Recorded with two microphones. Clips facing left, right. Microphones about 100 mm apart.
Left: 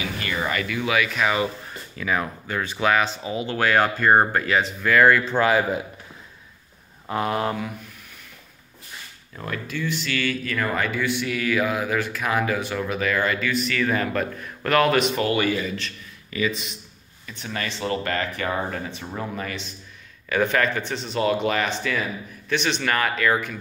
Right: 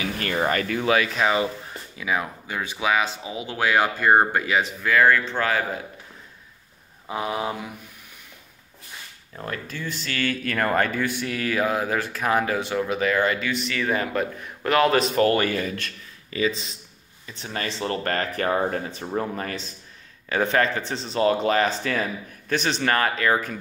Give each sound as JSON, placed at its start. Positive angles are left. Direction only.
{"t": 0.2, "sound": "speech", "side_deg": -45}
{"t": 2.0, "sound": "speech", "side_deg": -10}
{"t": 7.1, "sound": "speech", "side_deg": -5}
{"t": 9.4, "sound": "speech", "side_deg": -40}
{"t": 15.0, "sound": "speech", "side_deg": -40}
{"t": 16.3, "sound": "speech", "side_deg": -30}